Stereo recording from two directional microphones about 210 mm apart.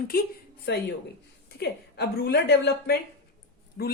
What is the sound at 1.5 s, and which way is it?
A woman's voice, 50° left (ahead or behind).